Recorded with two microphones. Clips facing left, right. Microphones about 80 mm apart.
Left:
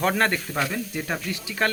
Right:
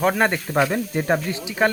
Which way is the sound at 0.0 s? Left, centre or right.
Centre.